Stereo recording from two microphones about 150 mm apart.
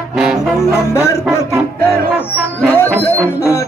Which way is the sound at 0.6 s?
20° left (ahead or behind).